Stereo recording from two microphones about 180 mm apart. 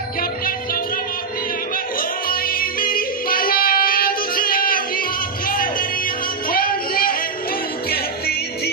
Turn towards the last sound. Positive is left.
turn(degrees=55)  # may be behind; listen again after turning